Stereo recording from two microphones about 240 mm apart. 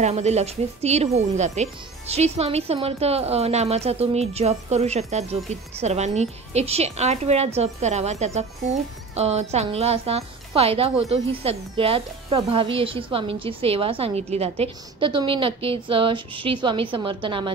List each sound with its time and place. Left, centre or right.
0.0 s speech: right